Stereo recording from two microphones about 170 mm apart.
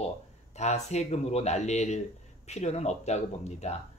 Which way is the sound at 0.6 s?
40° left (ahead or behind).